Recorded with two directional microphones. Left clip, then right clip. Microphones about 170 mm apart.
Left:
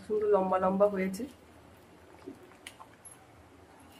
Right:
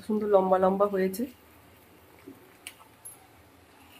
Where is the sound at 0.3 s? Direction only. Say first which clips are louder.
Right 6 dB; 60° right (ahead or behind).